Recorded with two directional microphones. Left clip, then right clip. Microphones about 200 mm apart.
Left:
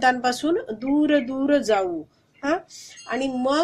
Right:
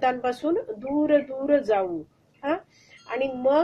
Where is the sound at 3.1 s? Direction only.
40° left (ahead or behind).